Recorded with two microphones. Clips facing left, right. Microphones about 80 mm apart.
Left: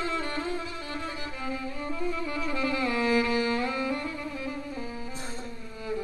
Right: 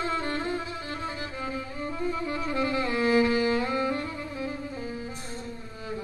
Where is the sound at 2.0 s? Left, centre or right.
Right.